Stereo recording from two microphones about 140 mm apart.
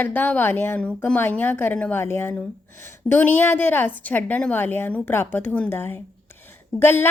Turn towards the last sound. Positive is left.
turn(degrees=15)  # may be behind; listen again after turning